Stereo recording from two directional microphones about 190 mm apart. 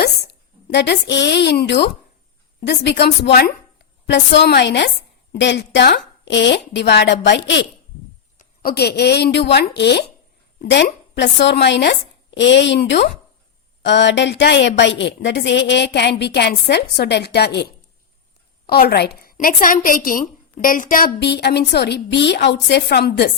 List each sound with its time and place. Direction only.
0.7 s a woman's voice: 65° left (ahead or behind)
8.4 s a woman's voice: 55° left (ahead or behind)
21.2 s a woman's voice: 60° left (ahead or behind)